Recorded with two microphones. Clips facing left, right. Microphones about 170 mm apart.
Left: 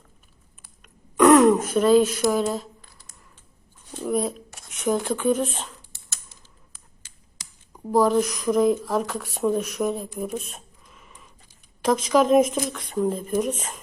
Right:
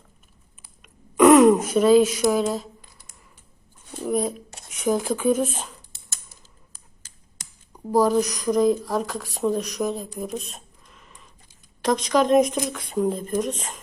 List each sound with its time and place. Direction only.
0.8 s throat clearing: 5° right (ahead or behind)
2.3 s speech: centre (ahead or behind)
4.0 s speech: centre (ahead or behind)
7.7 s speech: centre (ahead or behind)